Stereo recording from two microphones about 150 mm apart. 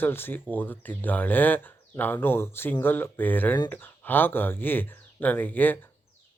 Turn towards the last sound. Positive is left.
turn(degrees=10)  # may be behind; listen again after turning